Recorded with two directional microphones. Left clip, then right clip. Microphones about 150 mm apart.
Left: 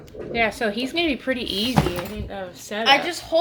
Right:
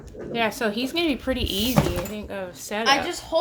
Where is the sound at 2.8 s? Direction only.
50° left (ahead or behind).